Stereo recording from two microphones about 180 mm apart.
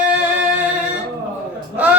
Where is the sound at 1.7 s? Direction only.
10° right (ahead or behind).